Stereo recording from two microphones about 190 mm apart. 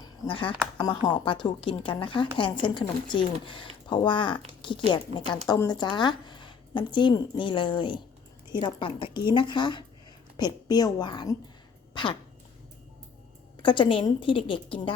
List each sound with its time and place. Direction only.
0.0 s speech: 25° left (ahead or behind)
13.6 s speech: 25° left (ahead or behind)